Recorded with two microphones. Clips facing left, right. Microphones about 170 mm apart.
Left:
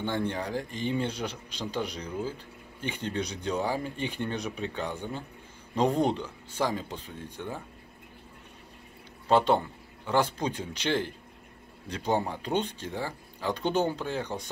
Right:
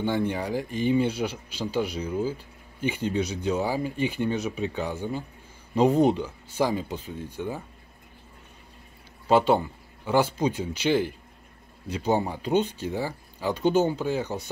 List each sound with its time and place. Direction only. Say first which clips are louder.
0.0 s speech: right 4 dB; 10° right (ahead or behind)
9.3 s speech: right 3 dB; 5° right (ahead or behind)